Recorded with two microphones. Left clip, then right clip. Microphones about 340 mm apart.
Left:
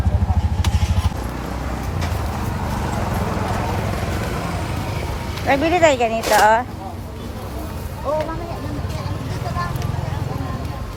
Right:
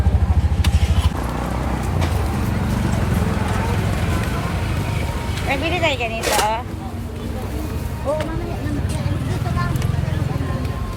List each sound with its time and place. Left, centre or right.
5.5 s speech: left